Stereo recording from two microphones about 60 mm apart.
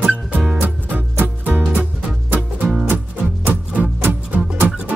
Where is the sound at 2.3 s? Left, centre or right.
Centre.